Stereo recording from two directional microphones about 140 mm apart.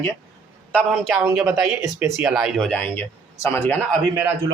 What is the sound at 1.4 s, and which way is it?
Speech, 20° right (ahead or behind).